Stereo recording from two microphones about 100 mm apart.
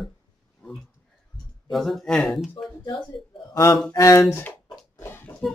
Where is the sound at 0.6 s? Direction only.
10° left (ahead or behind).